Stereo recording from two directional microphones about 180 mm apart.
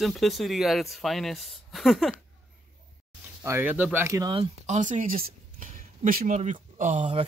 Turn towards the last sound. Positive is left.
turn(degrees=-40)  # may be behind; listen again after turning